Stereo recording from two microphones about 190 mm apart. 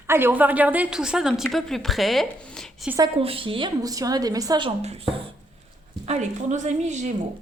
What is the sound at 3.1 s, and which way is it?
A woman's voice, 30° right (ahead or behind).